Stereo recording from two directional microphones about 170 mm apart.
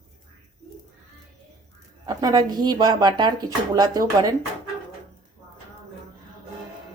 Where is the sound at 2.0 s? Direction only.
25° right (ahead or behind).